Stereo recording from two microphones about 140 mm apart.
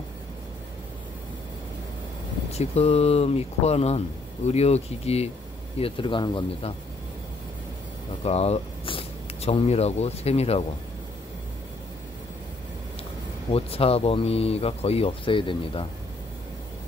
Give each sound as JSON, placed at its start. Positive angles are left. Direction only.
{"t": 2.5, "sound": "speech", "side_deg": 50}
{"t": 5.8, "sound": "speech", "side_deg": 40}
{"t": 8.2, "sound": "speech", "side_deg": 45}
{"t": 13.5, "sound": "speech", "side_deg": 45}